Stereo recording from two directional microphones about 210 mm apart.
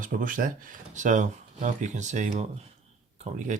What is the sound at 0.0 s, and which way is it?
Speech, 40° right (ahead or behind).